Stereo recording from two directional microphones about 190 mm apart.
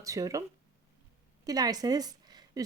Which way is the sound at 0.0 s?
20° right (ahead or behind).